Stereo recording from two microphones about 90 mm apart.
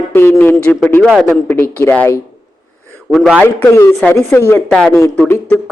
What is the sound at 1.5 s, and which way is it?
Speech, 25° left (ahead or behind).